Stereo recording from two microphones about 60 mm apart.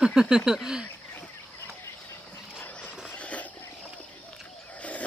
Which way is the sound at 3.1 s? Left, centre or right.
Left.